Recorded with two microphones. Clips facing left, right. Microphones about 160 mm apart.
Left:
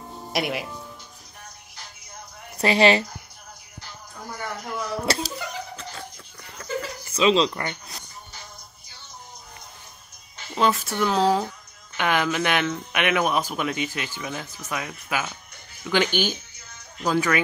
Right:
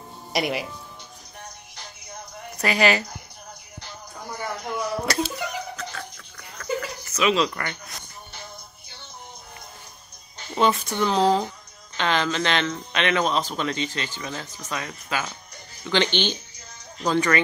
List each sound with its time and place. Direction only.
0.3 s speech: centre (ahead or behind)
2.6 s a woman's voice: 30° left (ahead or behind)
5.0 s speech: 30° left (ahead or behind)
5.8 s a sound: 25° left (ahead or behind)
10.5 s speech: centre (ahead or behind)